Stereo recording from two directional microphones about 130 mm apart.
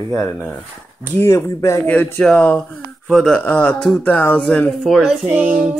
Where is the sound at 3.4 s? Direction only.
10° left (ahead or behind).